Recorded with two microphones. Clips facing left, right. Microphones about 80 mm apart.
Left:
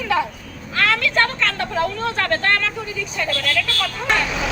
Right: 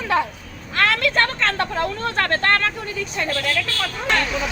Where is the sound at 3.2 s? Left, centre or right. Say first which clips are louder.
Left 1 dB; right.